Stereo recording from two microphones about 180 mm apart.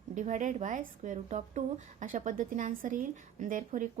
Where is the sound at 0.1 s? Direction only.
45° right (ahead or behind).